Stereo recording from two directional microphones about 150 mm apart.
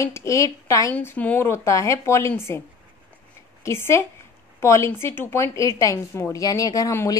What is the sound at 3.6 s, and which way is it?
A woman's voice, 15° left (ahead or behind).